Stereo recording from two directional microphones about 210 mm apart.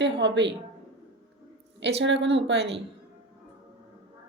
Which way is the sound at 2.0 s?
60° right (ahead or behind).